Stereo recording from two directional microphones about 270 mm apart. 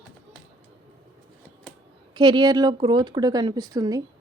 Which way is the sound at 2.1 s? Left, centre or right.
Centre.